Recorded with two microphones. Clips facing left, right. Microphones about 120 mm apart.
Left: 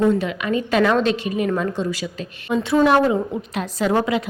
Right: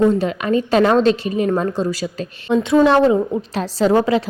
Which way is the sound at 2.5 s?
25° right (ahead or behind).